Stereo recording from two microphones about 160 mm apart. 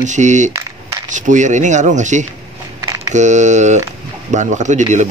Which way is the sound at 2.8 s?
20° right (ahead or behind).